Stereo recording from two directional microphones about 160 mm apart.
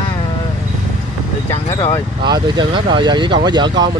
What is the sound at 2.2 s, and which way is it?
Speech, 25° right (ahead or behind).